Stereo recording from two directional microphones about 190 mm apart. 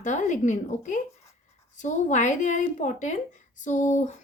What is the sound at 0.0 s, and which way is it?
A woman's voice, 40° left (ahead or behind).